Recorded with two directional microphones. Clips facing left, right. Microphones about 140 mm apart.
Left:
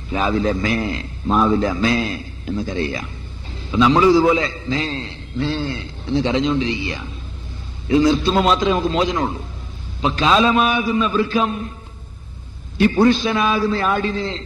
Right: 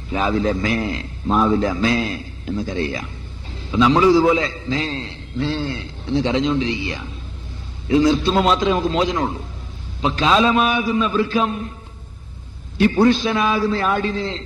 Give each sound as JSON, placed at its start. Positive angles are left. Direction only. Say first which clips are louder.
{"t": 0.1, "sound": "a man's voice", "louder": "even", "side_deg": -30}
{"t": 8.0, "sound": "a man's voice", "louder": "even", "side_deg": -30}
{"t": 12.7, "sound": "a man's voice", "louder": "even", "side_deg": -30}